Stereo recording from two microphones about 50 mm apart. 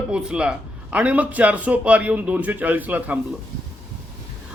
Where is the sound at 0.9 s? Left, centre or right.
Right.